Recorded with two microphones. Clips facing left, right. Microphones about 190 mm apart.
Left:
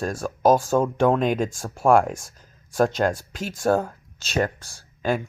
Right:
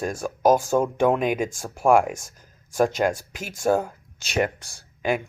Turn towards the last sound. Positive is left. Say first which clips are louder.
# even
turn(degrees=-15)  # may be behind; listen again after turning